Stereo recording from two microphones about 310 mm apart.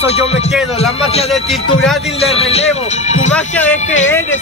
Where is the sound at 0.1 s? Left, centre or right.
Centre.